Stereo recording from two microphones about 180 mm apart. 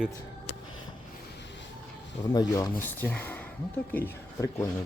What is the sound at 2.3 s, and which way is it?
Speech, 20° left (ahead or behind).